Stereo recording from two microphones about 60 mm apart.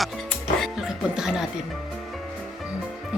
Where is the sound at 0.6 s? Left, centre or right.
Centre.